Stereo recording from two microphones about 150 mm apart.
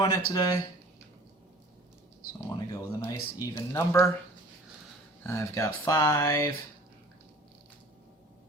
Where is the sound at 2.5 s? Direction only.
20° left (ahead or behind).